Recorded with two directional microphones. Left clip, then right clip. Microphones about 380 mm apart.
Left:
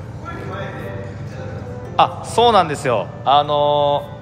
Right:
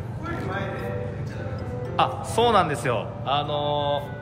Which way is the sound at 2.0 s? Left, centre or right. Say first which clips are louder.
Left 7 dB; centre.